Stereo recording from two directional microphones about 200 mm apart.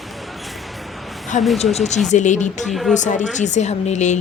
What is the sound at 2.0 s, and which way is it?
Speech, 35° left (ahead or behind).